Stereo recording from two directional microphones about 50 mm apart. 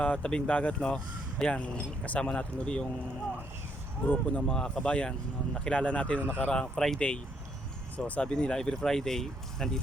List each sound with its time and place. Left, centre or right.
0.0 s speech: left
4.0 s speech: left
6.5 s speech: centre